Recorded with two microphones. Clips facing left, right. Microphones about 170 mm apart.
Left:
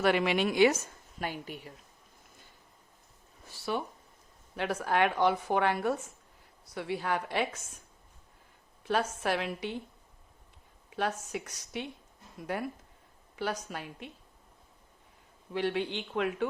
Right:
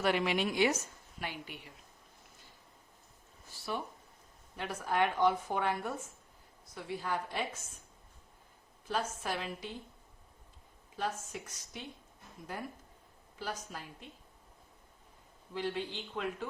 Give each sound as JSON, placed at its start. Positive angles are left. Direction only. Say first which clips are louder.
{"t": 0.0, "sound": "a woman's voice", "louder": "left 4 dB", "side_deg": 70}
{"t": 1.2, "sound": "a woman's voice", "louder": "left 5 dB", "side_deg": 40}
{"t": 4.5, "sound": "a woman's voice", "louder": "left 4 dB", "side_deg": 75}
{"t": 8.8, "sound": "a woman's voice", "louder": "left 6 dB", "side_deg": 70}
{"t": 10.9, "sound": "a woman's voice", "louder": "left 5 dB", "side_deg": 70}
{"t": 15.5, "sound": "a woman's voice", "louder": "left 6 dB", "side_deg": 70}